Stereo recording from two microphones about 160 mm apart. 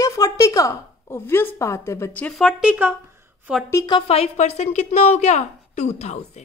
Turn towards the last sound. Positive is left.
turn(degrees=45)  # may be behind; listen again after turning